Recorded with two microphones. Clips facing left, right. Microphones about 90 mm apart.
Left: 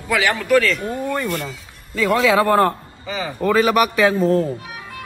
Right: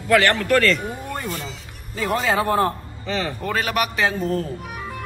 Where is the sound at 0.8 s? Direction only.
10° right (ahead or behind).